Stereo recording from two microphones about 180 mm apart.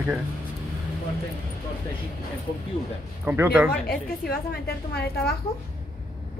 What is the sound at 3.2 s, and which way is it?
Speech, 10° right (ahead or behind).